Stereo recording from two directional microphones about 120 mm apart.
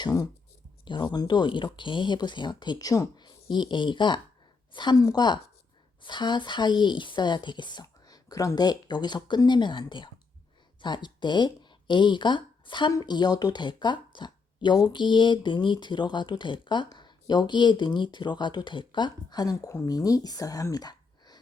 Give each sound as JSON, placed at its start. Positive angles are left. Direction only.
{"t": 0.0, "sound": "speech", "side_deg": 30}
{"t": 0.9, "sound": "speech", "side_deg": 40}